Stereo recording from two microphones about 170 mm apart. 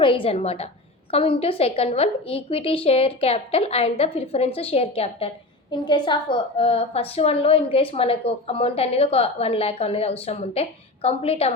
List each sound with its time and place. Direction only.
0.0 s a woman's voice: 30° left (ahead or behind)